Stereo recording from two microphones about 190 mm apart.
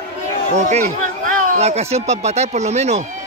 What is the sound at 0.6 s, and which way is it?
Speech, 35° right (ahead or behind).